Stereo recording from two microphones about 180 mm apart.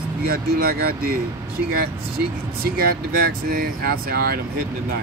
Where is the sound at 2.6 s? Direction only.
55° right (ahead or behind).